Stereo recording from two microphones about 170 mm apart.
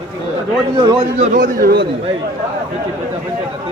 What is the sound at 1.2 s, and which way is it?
Speech, 50° right (ahead or behind).